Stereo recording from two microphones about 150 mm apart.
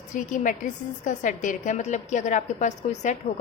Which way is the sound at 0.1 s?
55° left (ahead or behind).